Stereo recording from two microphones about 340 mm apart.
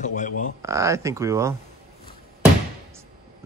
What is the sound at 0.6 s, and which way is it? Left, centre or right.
Speech, centre.